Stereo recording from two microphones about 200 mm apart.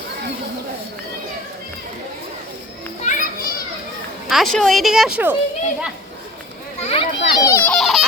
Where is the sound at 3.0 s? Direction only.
40° left (ahead or behind).